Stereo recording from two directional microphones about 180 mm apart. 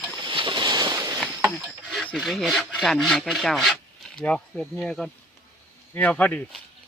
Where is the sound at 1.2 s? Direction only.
10° right (ahead or behind).